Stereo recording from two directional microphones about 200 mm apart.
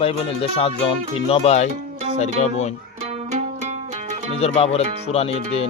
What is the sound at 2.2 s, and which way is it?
Music, 35° left (ahead or behind).